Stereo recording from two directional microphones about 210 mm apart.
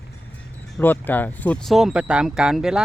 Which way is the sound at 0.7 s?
10° left (ahead or behind).